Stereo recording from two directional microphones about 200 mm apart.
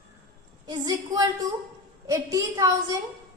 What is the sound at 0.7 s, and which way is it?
Speech, 20° right (ahead or behind).